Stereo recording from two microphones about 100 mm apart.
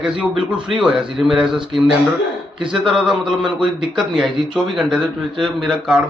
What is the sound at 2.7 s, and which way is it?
A man's voice, 5° right (ahead or behind).